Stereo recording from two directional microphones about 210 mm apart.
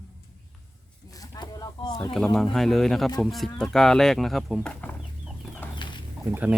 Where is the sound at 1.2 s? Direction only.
20° left (ahead or behind).